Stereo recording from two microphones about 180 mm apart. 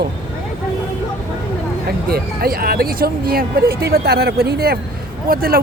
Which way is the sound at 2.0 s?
55° right (ahead or behind).